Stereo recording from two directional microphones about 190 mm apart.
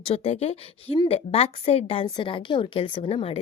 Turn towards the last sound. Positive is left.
turn(degrees=30)  # may be behind; listen again after turning